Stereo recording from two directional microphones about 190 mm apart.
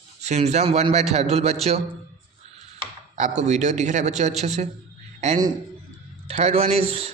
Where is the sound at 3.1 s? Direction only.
40° right (ahead or behind).